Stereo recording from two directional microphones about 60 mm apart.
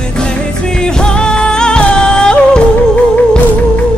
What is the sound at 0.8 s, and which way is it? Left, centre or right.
Music, centre.